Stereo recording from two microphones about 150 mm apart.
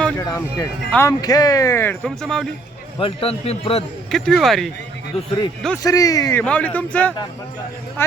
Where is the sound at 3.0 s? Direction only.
40° left (ahead or behind).